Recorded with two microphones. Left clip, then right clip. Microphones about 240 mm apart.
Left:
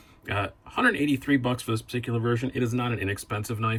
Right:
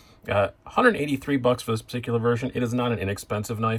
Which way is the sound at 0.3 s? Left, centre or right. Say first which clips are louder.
Right 6 dB; centre.